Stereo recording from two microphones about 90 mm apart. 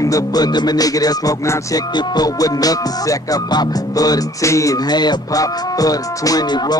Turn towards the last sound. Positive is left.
turn(degrees=45)  # may be behind; listen again after turning